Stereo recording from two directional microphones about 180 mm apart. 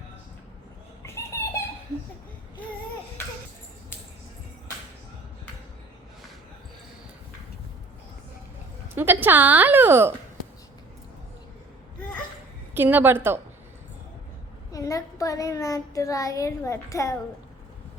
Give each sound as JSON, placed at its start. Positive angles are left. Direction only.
{"t": 1.0, "sound": "a sound", "side_deg": 15}
{"t": 9.0, "sound": "a woman's voice", "side_deg": -10}
{"t": 12.7, "sound": "a woman's voice", "side_deg": -10}
{"t": 14.7, "sound": "speech", "side_deg": 20}